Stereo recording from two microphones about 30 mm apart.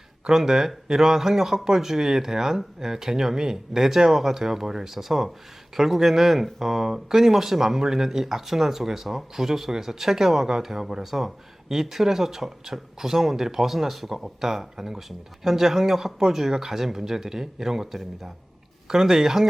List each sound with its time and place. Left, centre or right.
0.3 s speech: centre
18.9 s speech: centre